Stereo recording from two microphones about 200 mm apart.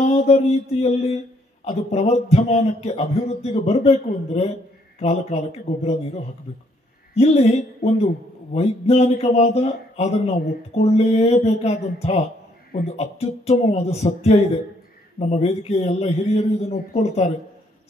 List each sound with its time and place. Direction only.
0.1 s speech: 30° left (ahead or behind)